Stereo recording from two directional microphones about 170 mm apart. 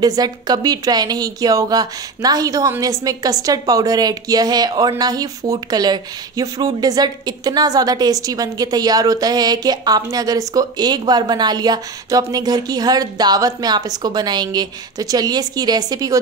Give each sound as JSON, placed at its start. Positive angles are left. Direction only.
{"t": 0.0, "sound": "speech", "side_deg": -25}